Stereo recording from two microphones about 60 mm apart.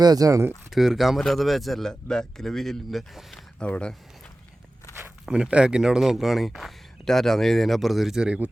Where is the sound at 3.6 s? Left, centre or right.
Centre.